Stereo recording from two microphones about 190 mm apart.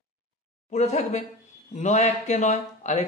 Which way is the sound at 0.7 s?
35° left (ahead or behind).